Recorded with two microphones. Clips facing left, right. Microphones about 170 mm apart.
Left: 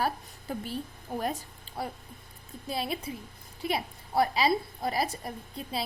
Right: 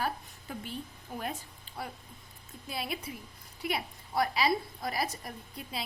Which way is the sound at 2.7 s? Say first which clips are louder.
Left 4 dB; 30° left (ahead or behind).